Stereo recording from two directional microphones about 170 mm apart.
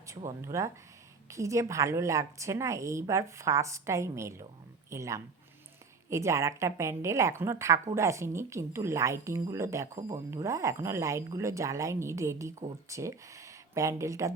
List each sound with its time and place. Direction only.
0.1 s a woman's voice: 20° right (ahead or behind)